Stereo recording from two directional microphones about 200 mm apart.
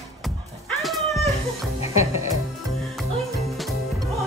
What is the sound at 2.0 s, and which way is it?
Music, 15° right (ahead or behind).